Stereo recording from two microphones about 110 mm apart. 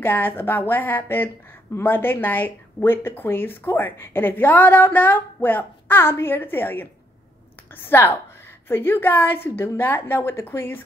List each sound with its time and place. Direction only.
0.0 s speech: 20° left (ahead or behind)